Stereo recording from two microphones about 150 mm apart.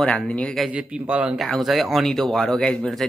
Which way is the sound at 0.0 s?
5° left (ahead or behind).